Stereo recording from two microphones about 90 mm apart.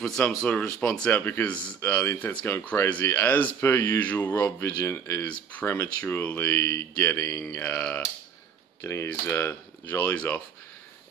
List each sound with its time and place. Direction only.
0.4 s speech: 10° left (ahead or behind)
8.8 s speech: 30° left (ahead or behind)